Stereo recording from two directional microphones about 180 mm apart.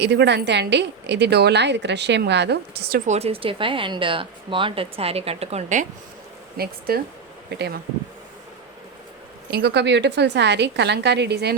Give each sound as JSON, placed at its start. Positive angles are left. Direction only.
{"t": 0.0, "sound": "a woman's voice", "side_deg": -70}
{"t": 3.1, "sound": "speech", "side_deg": -35}
{"t": 6.6, "sound": "a woman's voice", "side_deg": -60}
{"t": 9.5, "sound": "a woman's voice", "side_deg": -65}